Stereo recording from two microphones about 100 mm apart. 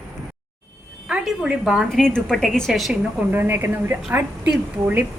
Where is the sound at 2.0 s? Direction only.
10° left (ahead or behind).